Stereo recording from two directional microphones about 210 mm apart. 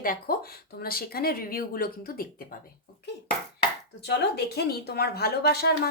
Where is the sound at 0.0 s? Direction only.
45° left (ahead or behind).